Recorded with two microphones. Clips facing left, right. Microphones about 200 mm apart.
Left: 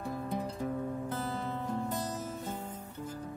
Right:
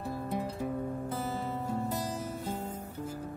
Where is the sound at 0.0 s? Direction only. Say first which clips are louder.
Right 1 dB; 5° right (ahead or behind).